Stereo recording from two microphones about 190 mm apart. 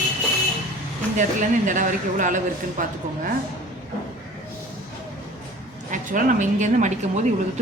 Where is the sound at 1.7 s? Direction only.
45° right (ahead or behind).